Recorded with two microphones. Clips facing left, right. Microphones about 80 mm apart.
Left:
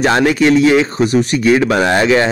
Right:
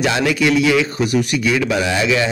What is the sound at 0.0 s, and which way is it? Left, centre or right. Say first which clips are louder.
Speech: left 5 dB; left.